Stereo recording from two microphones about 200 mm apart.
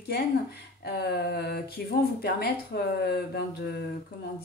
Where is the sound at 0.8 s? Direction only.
55° left (ahead or behind).